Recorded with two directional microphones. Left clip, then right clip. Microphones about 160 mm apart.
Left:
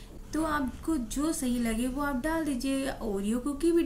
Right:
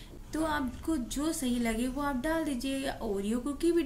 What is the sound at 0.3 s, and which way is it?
Speech, 10° right (ahead or behind).